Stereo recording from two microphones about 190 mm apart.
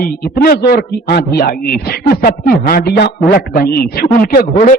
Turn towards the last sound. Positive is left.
turn(degrees=45)  # may be behind; listen again after turning